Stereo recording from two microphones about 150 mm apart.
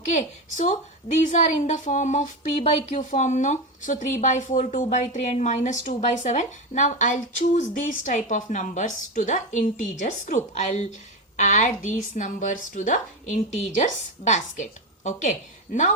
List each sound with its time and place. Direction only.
0.1 s a woman's voice: 55° left (ahead or behind)